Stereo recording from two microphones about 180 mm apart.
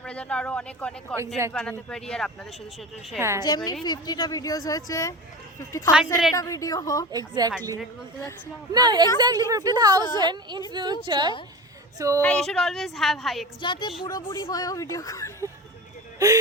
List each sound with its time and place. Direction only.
0.0 s a woman's voice: 5° left (ahead or behind)
3.2 s a woman's voice: 15° right (ahead or behind)
3.4 s speech: 20° left (ahead or behind)
7.1 s a woman's voice: 20° right (ahead or behind)
8.7 s a woman's voice: 25° right (ahead or behind)
12.2 s a woman's voice: 5° left (ahead or behind)
13.6 s speech: 25° left (ahead or behind)
16.1 s speech: 20° right (ahead or behind)